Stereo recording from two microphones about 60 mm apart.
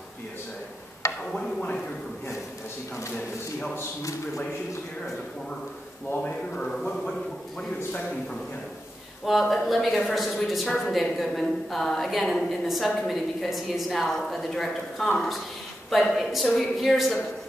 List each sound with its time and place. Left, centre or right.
1.3 s a sound: centre
6.1 s speech: left
9.2 s a woman's voice: centre